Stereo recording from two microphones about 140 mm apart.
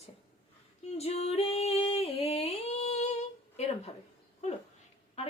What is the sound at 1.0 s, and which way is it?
Singing, 50° left (ahead or behind).